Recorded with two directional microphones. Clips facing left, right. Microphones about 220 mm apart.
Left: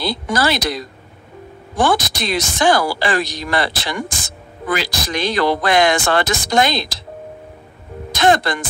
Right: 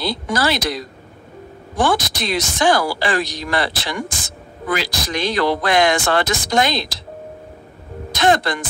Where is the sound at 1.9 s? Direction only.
50° left (ahead or behind).